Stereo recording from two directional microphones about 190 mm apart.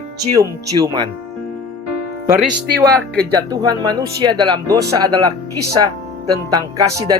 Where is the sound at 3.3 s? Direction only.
20° right (ahead or behind).